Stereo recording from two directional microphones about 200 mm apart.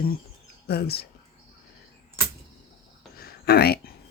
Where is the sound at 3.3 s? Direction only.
50° left (ahead or behind).